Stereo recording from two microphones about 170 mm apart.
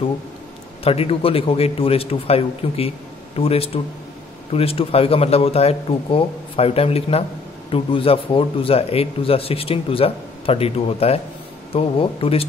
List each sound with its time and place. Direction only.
0.8 s a man's voice: 35° left (ahead or behind)